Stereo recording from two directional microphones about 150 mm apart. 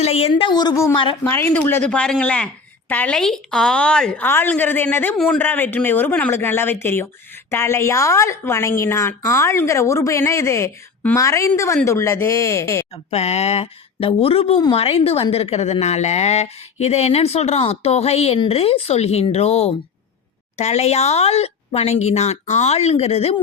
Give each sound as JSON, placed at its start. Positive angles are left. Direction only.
{"t": 0.0, "sound": "a woman's voice", "side_deg": 40}
{"t": 12.9, "sound": "a woman's voice", "side_deg": 45}